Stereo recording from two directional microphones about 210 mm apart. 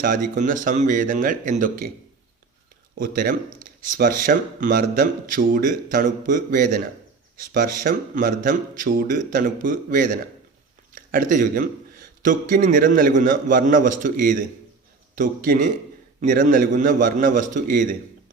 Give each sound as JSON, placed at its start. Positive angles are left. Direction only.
{"t": 0.0, "sound": "speech", "side_deg": -40}
{"t": 3.0, "sound": "speech", "side_deg": -45}